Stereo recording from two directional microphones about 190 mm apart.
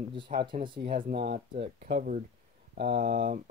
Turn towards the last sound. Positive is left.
turn(degrees=-55)  # may be behind; listen again after turning